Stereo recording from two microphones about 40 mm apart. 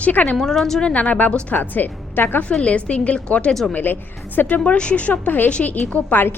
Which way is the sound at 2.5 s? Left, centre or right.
Left.